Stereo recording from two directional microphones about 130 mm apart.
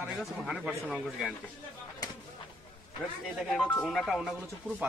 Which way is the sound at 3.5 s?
10° left (ahead or behind).